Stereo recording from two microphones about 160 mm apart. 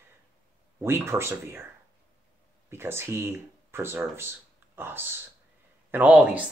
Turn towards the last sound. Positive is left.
turn(degrees=-5)  # may be behind; listen again after turning